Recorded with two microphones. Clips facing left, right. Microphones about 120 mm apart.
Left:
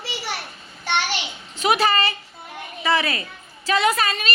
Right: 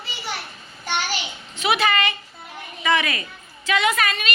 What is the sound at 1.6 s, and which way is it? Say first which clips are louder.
A woman's voice: left 1 dB; 40° left (ahead or behind).